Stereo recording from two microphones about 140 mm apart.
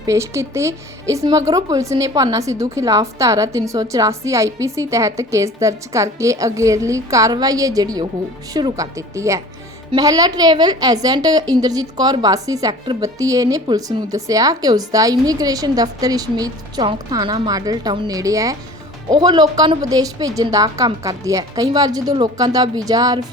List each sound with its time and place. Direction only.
0.0 s a woman's voice: 20° right (ahead or behind)